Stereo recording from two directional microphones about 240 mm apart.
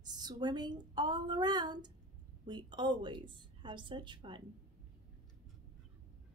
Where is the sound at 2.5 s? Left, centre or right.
Centre.